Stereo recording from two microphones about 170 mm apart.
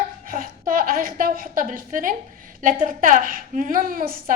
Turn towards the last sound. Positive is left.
turn(degrees=-55)  # may be behind; listen again after turning